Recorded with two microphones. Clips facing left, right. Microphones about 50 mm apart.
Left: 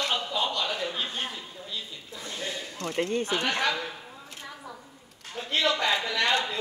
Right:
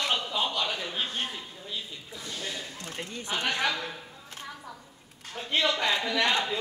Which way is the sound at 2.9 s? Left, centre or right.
Left.